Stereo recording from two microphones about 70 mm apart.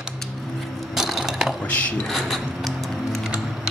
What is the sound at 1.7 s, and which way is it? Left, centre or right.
Speech, centre.